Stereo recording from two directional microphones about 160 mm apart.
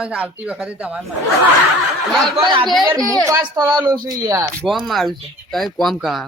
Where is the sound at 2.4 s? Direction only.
30° right (ahead or behind).